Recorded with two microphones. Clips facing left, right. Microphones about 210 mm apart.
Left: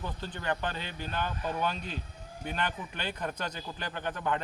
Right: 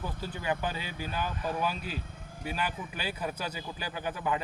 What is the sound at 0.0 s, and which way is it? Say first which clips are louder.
Speech: right 1 dB; 10° right (ahead or behind).